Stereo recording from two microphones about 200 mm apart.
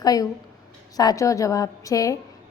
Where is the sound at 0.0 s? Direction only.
20° left (ahead or behind).